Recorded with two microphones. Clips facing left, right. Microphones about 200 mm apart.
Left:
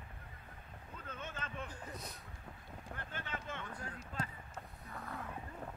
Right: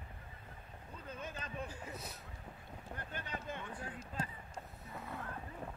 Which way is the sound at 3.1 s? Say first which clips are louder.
Right 1 dB; 40° right (ahead or behind).